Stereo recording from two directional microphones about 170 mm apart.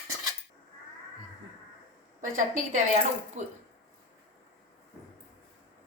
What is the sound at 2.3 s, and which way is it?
A woman's voice, 50° right (ahead or behind).